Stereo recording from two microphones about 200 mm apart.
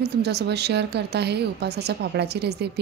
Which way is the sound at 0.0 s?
55° right (ahead or behind).